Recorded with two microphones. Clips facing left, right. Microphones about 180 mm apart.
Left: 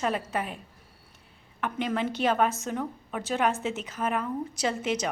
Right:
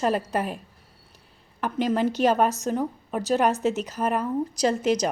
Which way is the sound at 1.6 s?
35° right (ahead or behind).